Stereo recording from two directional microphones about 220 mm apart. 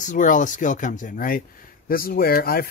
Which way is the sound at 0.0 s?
35° left (ahead or behind).